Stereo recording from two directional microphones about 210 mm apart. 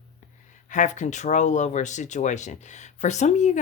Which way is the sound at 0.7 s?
35° left (ahead or behind).